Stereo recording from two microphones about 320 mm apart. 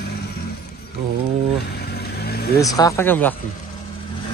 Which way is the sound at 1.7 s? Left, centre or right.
Left.